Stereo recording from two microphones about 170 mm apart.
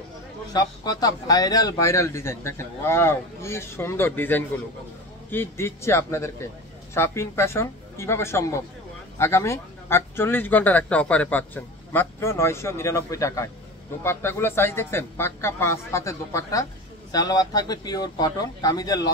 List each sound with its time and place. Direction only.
0.5 s speech: 25° left (ahead or behind)